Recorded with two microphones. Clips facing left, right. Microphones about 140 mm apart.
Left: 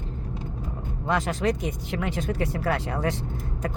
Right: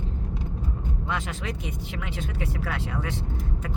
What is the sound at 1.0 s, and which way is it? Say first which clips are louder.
Speech: left 9 dB; 40° left (ahead or behind).